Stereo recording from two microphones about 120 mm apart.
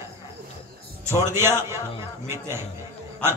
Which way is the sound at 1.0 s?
20° right (ahead or behind).